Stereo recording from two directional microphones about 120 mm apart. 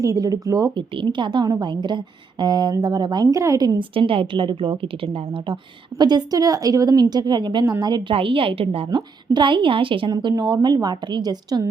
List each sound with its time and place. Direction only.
0.0 s speech: 30° right (ahead or behind)
0.8 s a woman's voice: 40° right (ahead or behind)
3.8 s a woman's voice: 45° right (ahead or behind)
6.0 s a woman's voice: 35° right (ahead or behind)